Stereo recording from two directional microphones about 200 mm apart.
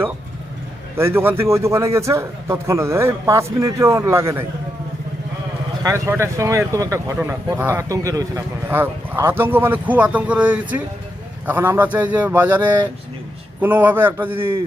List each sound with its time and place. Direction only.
0.9 s a man's voice: 10° right (ahead or behind)
5.8 s a man's voice: 15° right (ahead or behind)